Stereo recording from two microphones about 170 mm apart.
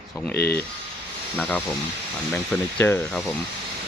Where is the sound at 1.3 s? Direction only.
10° left (ahead or behind).